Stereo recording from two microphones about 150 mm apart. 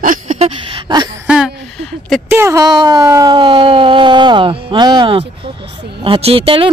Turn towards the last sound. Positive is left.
turn(degrees=-40)  # may be behind; listen again after turning